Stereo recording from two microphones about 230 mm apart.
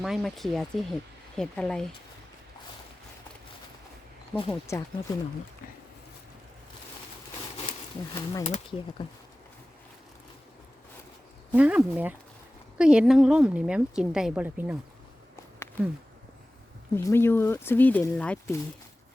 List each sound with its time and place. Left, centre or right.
0.0 s a woman's voice: centre
4.4 s speech: left
7.7 s speech: centre
8.4 s speech: left
11.5 s a woman's voice: centre
16.9 s speech: centre